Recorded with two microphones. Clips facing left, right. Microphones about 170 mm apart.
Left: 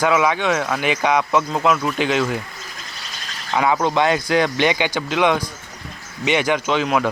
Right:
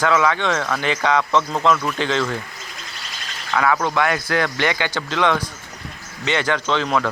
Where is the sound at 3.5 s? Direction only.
20° left (ahead or behind).